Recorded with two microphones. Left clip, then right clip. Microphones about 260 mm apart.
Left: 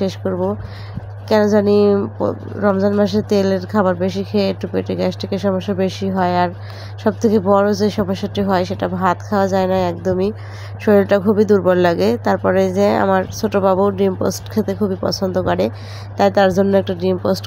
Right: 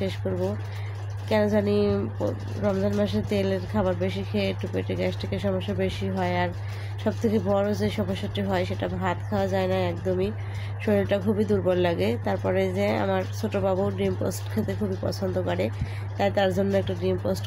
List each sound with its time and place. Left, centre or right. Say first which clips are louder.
0.2 s speech: left 8 dB; left
1.5 s speech: left 11 dB; left